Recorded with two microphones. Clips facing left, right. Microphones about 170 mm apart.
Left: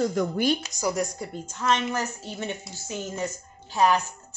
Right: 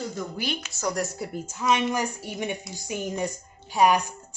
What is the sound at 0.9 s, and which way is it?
A woman's voice, 5° right (ahead or behind).